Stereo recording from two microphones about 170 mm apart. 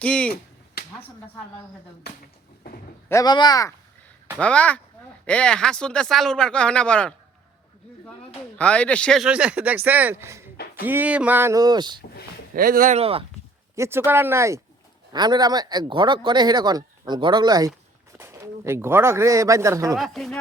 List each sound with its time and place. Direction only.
0.0 s speech: 5° left (ahead or behind)
3.1 s speech: 20° left (ahead or behind)
4.4 s speech: 5° left (ahead or behind); by 11.9 s 25° right (ahead or behind)
12.5 s speech: 55° right (ahead or behind)
13.0 s speech: 35° right (ahead or behind)
13.7 s speech: 15° right (ahead or behind)
20.0 s speech: centre (ahead or behind)